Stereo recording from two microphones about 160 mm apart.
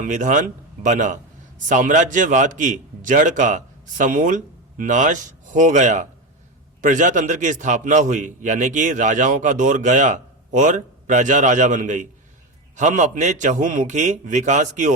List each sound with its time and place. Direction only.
0.0 s a man's voice: 50° right (ahead or behind)